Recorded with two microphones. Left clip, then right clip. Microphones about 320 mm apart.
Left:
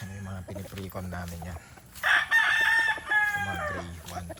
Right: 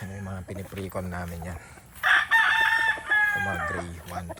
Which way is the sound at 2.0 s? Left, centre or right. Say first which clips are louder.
Right 2 dB; left.